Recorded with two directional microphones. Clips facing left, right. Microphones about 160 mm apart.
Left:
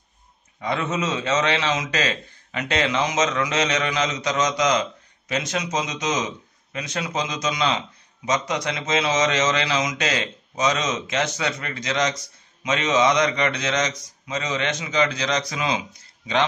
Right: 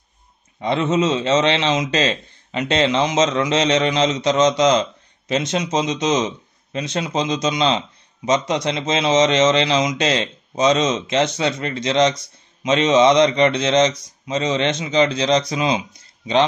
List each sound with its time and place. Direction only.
0.6 s a man's voice: 25° right (ahead or behind)